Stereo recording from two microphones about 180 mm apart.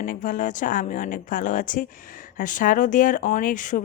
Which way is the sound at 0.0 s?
45° left (ahead or behind).